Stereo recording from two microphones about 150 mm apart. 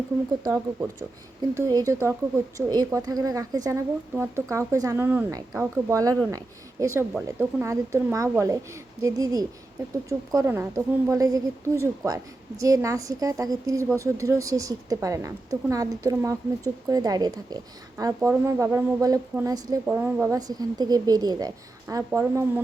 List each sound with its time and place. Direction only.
0.4 s a woman's voice: 25° right (ahead or behind)
19.9 s a woman's voice: 10° right (ahead or behind)
20.3 s a woman's voice: 25° right (ahead or behind)